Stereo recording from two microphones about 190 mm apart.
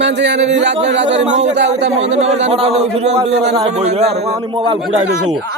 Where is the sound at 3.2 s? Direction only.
60° right (ahead or behind).